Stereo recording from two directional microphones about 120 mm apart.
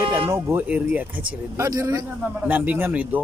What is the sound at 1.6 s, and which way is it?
Speech, 25° right (ahead or behind).